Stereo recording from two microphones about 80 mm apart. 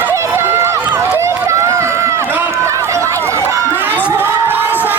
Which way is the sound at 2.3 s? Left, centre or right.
Right.